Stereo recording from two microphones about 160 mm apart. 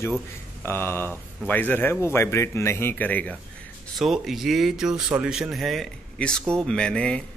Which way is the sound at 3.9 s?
Centre (ahead or behind).